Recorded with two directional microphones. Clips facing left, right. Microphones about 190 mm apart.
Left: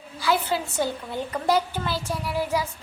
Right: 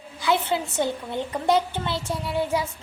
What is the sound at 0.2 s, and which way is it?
A woman's voice, 20° right (ahead or behind).